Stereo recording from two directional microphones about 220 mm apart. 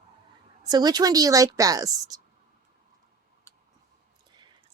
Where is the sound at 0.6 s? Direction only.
20° right (ahead or behind).